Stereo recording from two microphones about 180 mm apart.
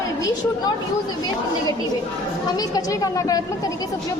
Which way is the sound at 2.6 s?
20° left (ahead or behind).